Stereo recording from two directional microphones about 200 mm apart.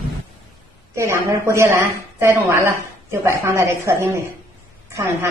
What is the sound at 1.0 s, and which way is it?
A woman's voice, 15° right (ahead or behind).